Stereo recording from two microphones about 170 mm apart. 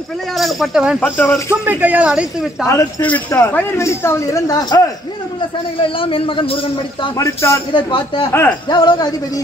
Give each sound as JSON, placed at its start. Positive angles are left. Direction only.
{"t": 0.4, "sound": "speech", "side_deg": 0}
{"t": 0.9, "sound": "speech", "side_deg": 10}
{"t": 1.5, "sound": "speech", "side_deg": -10}
{"t": 2.6, "sound": "speech", "side_deg": 15}
{"t": 5.8, "sound": "a man's voice", "side_deg": 30}
{"t": 7.0, "sound": "speech", "side_deg": 20}
{"t": 7.7, "sound": "a man's voice", "side_deg": 30}
{"t": 8.3, "sound": "speech", "side_deg": 15}
{"t": 8.6, "sound": "speech", "side_deg": 25}